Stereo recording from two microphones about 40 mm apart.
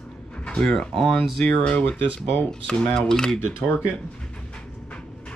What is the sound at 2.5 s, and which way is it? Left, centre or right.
Speech, left.